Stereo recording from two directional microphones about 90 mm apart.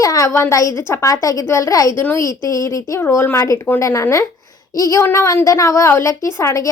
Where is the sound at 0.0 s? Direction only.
40° left (ahead or behind).